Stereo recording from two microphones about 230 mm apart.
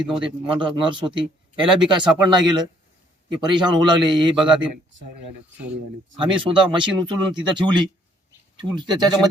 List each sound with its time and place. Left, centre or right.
0.2 s speech: right
5.5 s speech: centre
6.1 s speech: right